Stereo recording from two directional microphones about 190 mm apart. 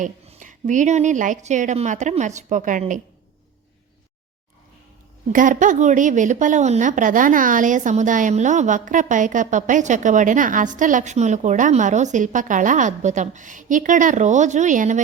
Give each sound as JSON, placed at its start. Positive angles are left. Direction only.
{"t": 0.0, "sound": "a woman's voice", "side_deg": -40}
{"t": 5.3, "sound": "a woman's voice", "side_deg": -45}